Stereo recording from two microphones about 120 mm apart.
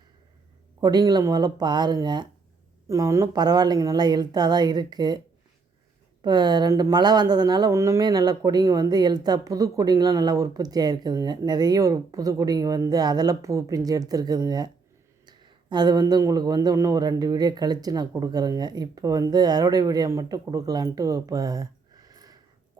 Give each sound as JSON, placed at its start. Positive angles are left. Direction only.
{"t": 0.8, "sound": "speech", "side_deg": -35}
{"t": 2.8, "sound": "speech", "side_deg": -25}
{"t": 6.2, "sound": "speech", "side_deg": -35}
{"t": 7.7, "sound": "speech", "side_deg": -25}
{"t": 8.0, "sound": "speech", "side_deg": -35}